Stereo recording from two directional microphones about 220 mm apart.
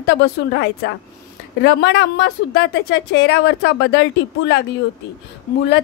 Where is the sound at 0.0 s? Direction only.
45° left (ahead or behind).